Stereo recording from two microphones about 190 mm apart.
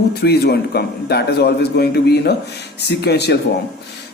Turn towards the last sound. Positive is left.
turn(degrees=60)  # may be behind; listen again after turning